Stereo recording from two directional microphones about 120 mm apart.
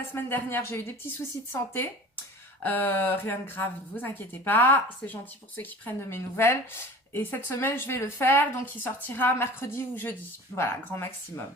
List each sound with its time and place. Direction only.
0.1 s a woman's voice: 15° left (ahead or behind)